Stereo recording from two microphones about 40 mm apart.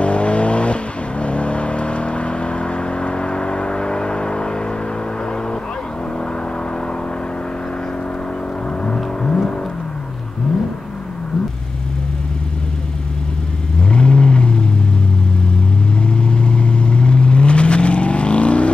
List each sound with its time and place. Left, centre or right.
0.0 s vehicle: left
8.8 s a sound: left
13.7 s vehicle: left
16.1 s vehicle: left